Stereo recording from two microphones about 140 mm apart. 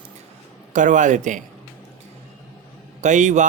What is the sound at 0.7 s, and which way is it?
Speech, 65° right (ahead or behind).